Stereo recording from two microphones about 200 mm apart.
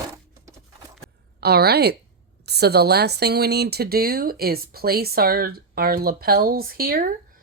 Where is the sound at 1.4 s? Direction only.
55° right (ahead or behind).